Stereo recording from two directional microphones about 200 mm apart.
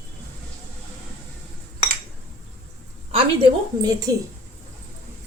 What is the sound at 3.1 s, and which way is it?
A woman's voice, 25° right (ahead or behind).